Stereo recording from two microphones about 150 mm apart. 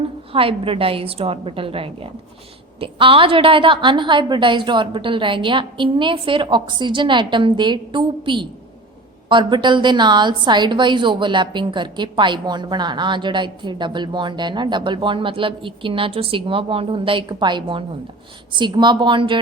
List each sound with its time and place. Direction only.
0.3 s a woman's voice: 40° right (ahead or behind)